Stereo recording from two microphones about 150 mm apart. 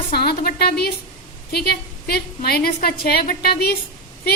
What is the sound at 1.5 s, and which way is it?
A woman's voice, 90° left.